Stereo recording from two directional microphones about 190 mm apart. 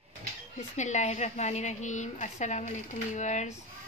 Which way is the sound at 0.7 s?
40° left (ahead or behind).